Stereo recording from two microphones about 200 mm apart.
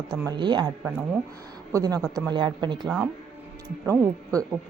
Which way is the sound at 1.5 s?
20° right (ahead or behind).